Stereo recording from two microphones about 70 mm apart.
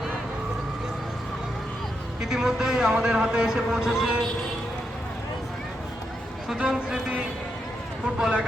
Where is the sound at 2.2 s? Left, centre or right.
Centre.